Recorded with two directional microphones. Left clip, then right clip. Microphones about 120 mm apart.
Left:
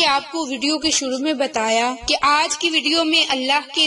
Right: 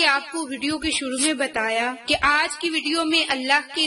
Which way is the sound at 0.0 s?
25° left (ahead or behind).